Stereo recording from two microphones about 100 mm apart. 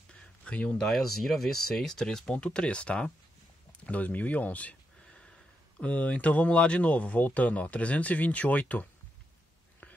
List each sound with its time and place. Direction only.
0.5 s speech: 10° left (ahead or behind)
3.8 s a sound: 15° left (ahead or behind)
5.8 s speech: 15° left (ahead or behind)